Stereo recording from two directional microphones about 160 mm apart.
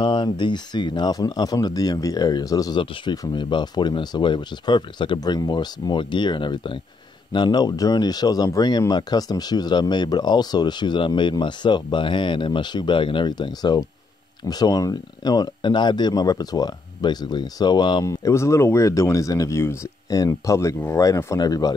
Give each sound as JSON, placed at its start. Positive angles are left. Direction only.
{"t": 0.0, "sound": "speech", "side_deg": 30}